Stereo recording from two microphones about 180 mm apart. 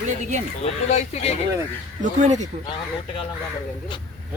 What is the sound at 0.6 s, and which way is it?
Speech, 35° left (ahead or behind).